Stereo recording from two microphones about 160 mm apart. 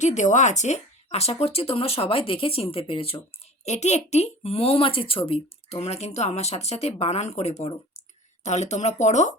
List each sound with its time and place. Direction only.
0.0 s speech: 50° left (ahead or behind)